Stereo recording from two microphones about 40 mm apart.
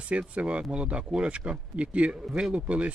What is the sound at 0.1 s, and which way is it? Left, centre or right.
Speech, right.